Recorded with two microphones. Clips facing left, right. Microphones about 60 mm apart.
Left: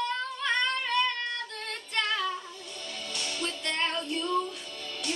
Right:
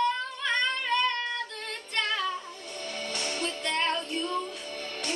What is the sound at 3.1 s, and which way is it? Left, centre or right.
Music, right.